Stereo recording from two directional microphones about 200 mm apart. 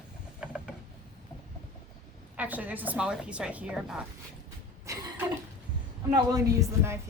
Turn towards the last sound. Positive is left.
turn(degrees=-15)  # may be behind; listen again after turning